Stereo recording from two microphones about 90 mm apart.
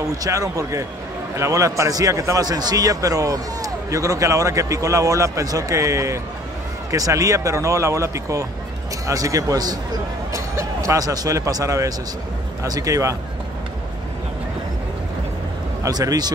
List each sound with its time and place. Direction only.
0.0 s a man's voice: 40° right (ahead or behind)
15.8 s speech: 45° right (ahead or behind)